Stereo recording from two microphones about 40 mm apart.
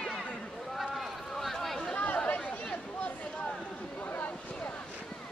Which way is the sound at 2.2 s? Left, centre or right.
Left.